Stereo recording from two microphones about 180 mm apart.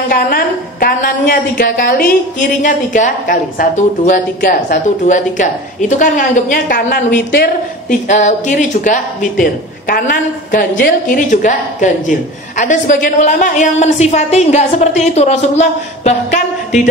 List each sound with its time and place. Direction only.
0.1 s a woman's voice: 55° left (ahead or behind)